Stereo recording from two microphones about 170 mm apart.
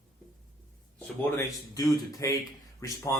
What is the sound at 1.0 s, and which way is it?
Speech, 15° left (ahead or behind).